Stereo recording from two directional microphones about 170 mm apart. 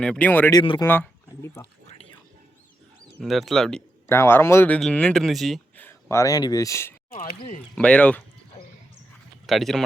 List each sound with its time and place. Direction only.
0.0 s speech: 5° left (ahead or behind)
0.5 s speech: 25° left (ahead or behind)
0.9 s a sound: 15° left (ahead or behind)
3.2 s speech: centre (ahead or behind)
4.0 s speech: 15° left (ahead or behind)
5.8 s speech: 15° left (ahead or behind)
7.1 s speech: 55° left (ahead or behind)
7.8 s speech: 5° left (ahead or behind)
9.5 s speech: centre (ahead or behind)